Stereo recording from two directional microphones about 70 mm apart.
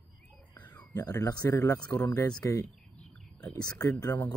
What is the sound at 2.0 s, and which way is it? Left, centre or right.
Speech, left.